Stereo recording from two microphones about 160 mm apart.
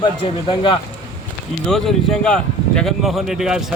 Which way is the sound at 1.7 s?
5° left (ahead or behind).